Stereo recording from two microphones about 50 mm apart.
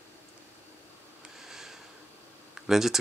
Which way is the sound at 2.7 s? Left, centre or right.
Centre.